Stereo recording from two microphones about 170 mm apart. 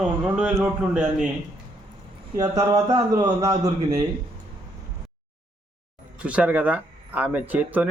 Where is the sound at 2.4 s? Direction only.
25° right (ahead or behind).